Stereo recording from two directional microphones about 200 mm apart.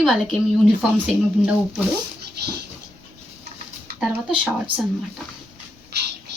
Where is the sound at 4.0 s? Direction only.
5° right (ahead or behind).